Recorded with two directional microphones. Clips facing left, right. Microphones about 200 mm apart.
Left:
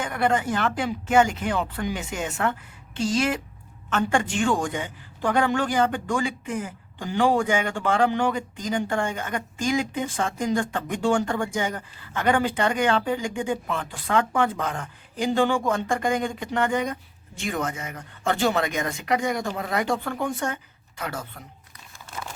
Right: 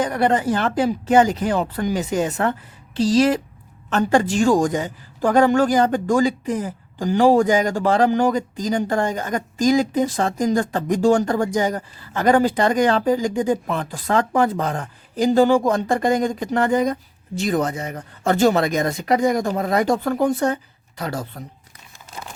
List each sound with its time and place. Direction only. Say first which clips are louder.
0.0 s a woman's voice: right 5 dB; 35° right (ahead or behind)